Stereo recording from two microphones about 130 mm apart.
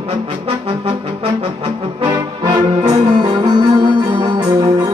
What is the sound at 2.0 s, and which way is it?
Brass instrument, 35° right (ahead or behind).